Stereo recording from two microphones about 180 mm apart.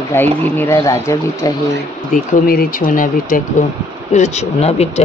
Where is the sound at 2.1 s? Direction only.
55° left (ahead or behind).